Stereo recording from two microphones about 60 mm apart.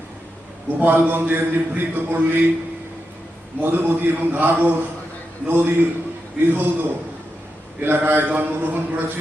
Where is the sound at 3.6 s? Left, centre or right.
Right.